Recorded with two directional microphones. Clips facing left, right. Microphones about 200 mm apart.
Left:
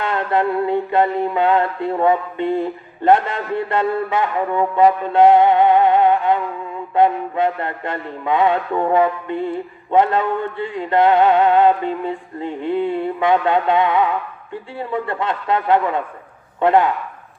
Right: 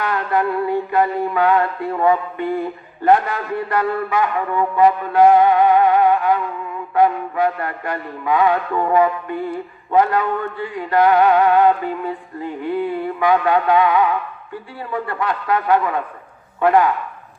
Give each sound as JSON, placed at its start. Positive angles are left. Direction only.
{"t": 0.0, "sound": "music", "side_deg": 25}